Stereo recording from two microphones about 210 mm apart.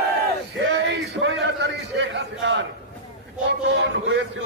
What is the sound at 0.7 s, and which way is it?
A man's voice, 55° right (ahead or behind).